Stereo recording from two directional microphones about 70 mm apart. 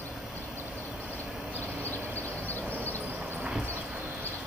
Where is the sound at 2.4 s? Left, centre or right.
Left.